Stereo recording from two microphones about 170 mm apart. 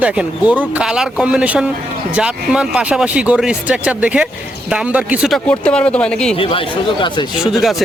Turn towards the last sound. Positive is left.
turn(degrees=-5)  # may be behind; listen again after turning